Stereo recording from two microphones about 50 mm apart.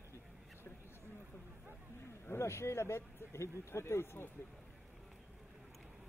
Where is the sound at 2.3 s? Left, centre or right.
Left.